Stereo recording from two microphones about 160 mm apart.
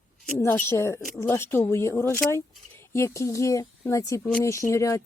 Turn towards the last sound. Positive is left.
turn(degrees=20)  # may be behind; listen again after turning